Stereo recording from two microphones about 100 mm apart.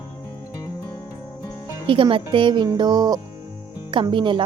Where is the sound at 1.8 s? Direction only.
60° right (ahead or behind); by 3.2 s 40° right (ahead or behind).